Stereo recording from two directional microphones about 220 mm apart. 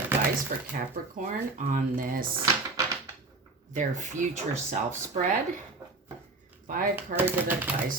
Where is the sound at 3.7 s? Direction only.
35° right (ahead or behind).